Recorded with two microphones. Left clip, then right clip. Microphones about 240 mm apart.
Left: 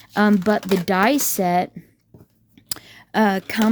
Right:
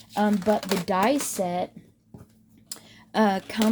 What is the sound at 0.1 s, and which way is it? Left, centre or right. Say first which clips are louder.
Speech: left 5 dB; left.